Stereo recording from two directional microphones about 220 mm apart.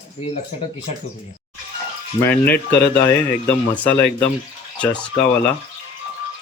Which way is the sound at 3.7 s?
5° left (ahead or behind).